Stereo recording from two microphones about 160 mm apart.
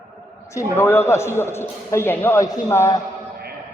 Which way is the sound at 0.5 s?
15° left (ahead or behind).